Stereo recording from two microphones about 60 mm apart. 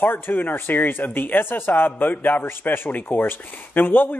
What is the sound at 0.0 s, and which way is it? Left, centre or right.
Speech, left.